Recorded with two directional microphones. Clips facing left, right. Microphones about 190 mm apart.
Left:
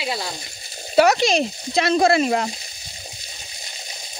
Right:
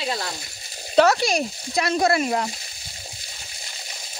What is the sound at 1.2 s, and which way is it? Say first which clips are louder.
Speech: left 4 dB; 20° left (ahead or behind).